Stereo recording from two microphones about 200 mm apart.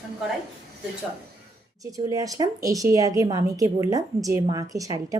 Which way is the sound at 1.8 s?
15° right (ahead or behind).